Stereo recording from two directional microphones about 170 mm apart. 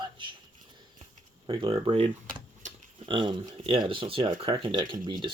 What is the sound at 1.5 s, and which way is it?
Speech, 35° right (ahead or behind).